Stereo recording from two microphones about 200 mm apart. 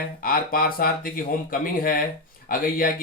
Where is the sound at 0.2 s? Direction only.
45° left (ahead or behind).